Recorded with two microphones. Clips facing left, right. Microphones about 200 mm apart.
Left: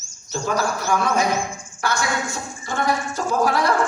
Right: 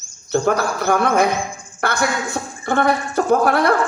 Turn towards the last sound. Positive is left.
turn(degrees=-60)  # may be behind; listen again after turning